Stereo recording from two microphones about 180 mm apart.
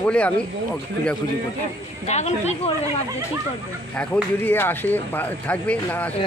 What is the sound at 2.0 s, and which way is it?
Speech, 40° left (ahead or behind).